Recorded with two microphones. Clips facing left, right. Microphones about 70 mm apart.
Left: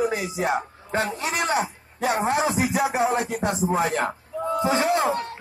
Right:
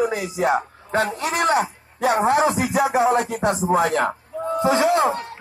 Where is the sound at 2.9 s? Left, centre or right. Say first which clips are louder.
Right 4 dB; right.